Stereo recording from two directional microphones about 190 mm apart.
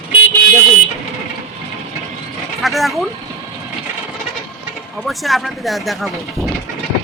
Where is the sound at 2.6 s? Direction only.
Centre (ahead or behind).